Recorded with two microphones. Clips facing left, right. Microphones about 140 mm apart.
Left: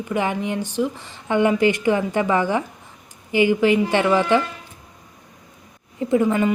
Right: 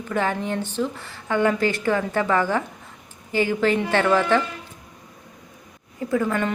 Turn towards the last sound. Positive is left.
turn(degrees=15)  # may be behind; listen again after turning